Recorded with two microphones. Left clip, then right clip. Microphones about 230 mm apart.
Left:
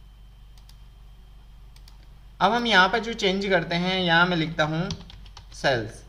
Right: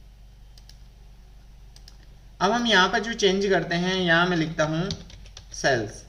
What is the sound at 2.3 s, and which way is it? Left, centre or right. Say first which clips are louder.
Speech: left 1 dB; centre.